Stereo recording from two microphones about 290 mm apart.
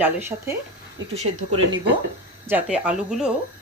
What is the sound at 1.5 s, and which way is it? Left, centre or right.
Speech, right.